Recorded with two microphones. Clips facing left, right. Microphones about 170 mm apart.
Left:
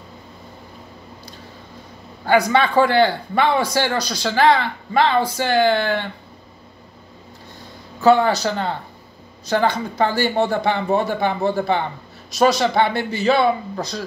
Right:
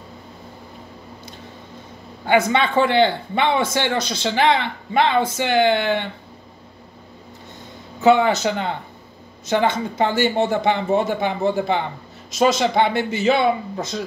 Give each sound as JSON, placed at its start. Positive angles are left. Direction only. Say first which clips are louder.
{"t": 2.2, "sound": "a man's voice", "louder": "left 1 dB", "side_deg": -20}
{"t": 8.0, "sound": "a man's voice", "louder": "even", "side_deg": -20}
{"t": 12.4, "sound": "a man's voice", "louder": "left 1 dB", "side_deg": -20}